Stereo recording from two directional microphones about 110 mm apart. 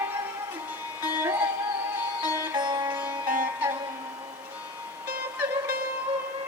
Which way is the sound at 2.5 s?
40° right (ahead or behind).